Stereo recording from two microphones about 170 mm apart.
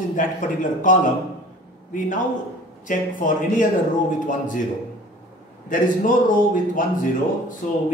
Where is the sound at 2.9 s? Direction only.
50° left (ahead or behind).